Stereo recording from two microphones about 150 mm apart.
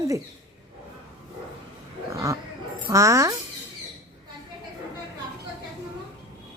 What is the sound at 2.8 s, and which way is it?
Speech, 20° right (ahead or behind).